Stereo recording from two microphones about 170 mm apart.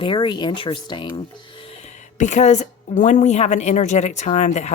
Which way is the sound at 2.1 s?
45° left (ahead or behind).